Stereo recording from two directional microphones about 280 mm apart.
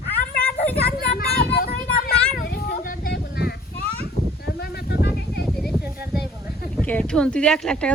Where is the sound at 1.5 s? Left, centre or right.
Left.